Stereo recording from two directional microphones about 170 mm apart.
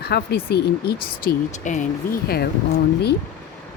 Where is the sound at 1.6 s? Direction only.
45° left (ahead or behind).